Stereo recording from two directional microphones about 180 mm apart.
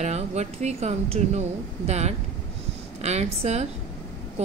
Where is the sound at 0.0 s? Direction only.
40° right (ahead or behind).